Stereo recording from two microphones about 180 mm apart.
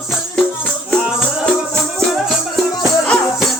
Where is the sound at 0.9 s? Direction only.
5° left (ahead or behind).